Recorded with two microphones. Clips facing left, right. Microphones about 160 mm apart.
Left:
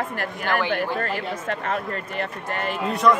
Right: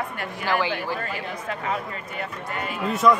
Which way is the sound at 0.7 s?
60° left (ahead or behind).